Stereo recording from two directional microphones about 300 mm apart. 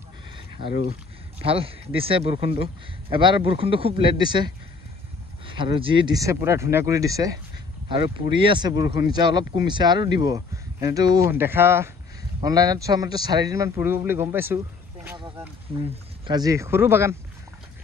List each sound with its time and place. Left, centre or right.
0.7 s speech: left
1.4 s speech: centre
5.5 s speech: centre
15.0 s a sound: centre
15.8 s speech: centre